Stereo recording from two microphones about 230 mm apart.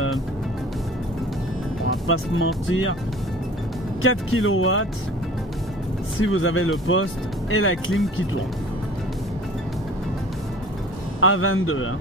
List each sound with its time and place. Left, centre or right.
2.0 s speech: left
4.0 s speech: left
6.1 s speech: left
11.1 s speech: left